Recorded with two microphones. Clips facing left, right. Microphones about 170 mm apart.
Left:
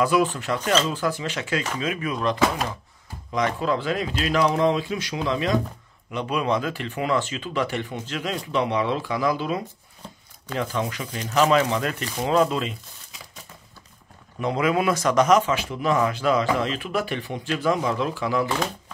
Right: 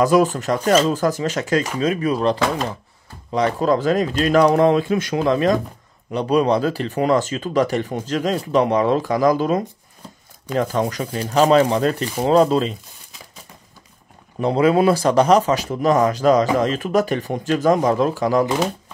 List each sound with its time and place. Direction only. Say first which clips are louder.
0.0 s speech: right 5 dB; 40° right (ahead or behind)
6.1 s speech: right 7 dB; 35° right (ahead or behind)
14.4 s speech: right 7 dB; 35° right (ahead or behind)